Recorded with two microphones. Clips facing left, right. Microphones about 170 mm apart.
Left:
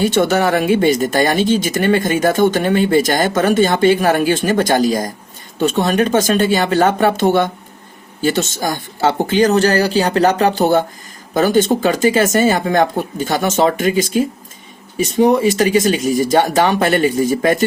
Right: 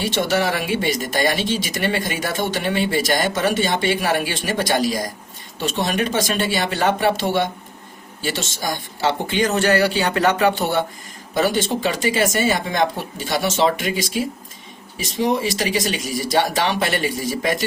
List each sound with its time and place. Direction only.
0.0 s speech: 45° left (ahead or behind)